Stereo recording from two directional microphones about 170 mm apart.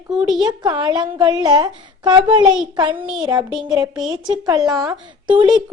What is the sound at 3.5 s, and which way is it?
Speech, 5° right (ahead or behind).